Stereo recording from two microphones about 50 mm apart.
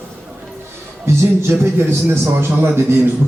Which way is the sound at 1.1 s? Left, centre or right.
Right.